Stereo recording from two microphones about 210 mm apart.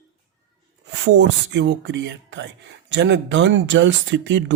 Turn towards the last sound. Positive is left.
turn(degrees=-60)  # may be behind; listen again after turning